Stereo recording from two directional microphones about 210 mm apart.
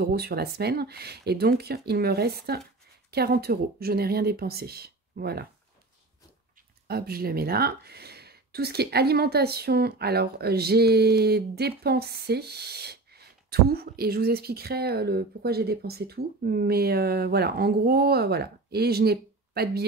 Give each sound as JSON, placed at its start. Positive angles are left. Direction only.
{"t": 0.0, "sound": "speech", "side_deg": -50}
{"t": 6.9, "sound": "speech", "side_deg": -45}